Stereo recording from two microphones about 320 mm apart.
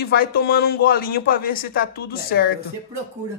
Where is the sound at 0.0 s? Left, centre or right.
Left.